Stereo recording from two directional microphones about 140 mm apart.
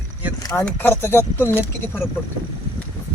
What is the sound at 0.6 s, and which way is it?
Speech, 15° left (ahead or behind).